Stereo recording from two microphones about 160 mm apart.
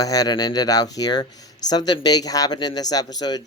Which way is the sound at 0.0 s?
25° left (ahead or behind).